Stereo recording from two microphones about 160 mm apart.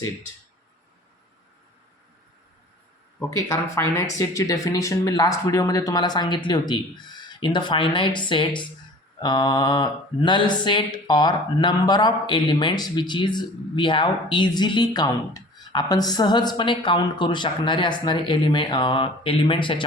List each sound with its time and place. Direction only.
3.2 s speech: 20° left (ahead or behind)